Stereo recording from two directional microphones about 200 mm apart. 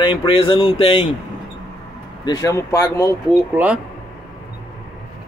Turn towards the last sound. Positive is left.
turn(degrees=-5)  # may be behind; listen again after turning